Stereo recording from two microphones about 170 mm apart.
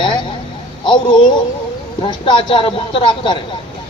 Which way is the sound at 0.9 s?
25° left (ahead or behind).